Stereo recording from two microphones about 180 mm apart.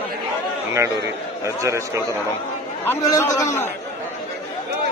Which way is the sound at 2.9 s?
15° left (ahead or behind).